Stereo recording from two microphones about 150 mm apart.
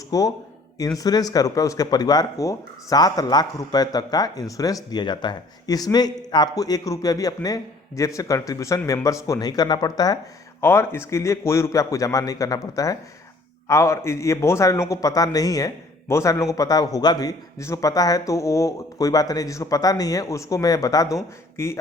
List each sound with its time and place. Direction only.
0.1 s speech: 25° left (ahead or behind)